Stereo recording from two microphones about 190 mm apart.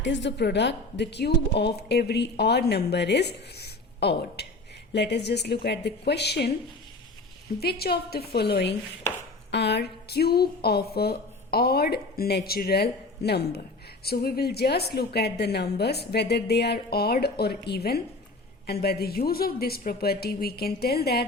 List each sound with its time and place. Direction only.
0.0 s a woman's voice: 70° left (ahead or behind)
7.6 s a woman's voice: 55° left (ahead or behind)